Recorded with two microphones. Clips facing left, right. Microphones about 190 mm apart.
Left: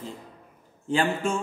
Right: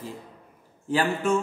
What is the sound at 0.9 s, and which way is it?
Speech, 30° left (ahead or behind).